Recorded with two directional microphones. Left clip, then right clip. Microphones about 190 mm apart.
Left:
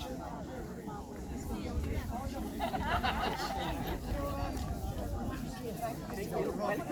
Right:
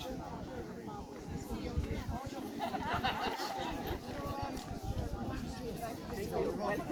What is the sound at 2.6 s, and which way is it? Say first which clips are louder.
Speech: left 2 dB; 10° right (ahead or behind).